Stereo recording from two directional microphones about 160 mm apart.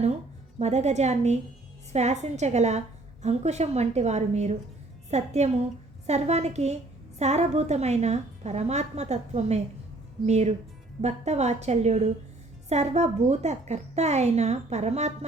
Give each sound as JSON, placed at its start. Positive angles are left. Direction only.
{"t": 0.6, "sound": "a woman's voice", "side_deg": -45}